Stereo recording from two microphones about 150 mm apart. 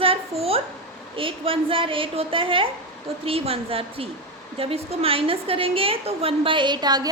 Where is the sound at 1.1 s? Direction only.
35° right (ahead or behind).